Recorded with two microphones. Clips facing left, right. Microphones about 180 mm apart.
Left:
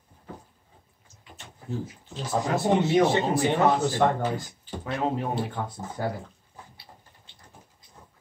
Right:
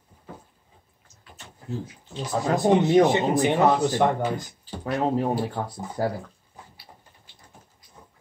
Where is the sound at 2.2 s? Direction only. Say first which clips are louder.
Right 3 dB; 15° right (ahead or behind).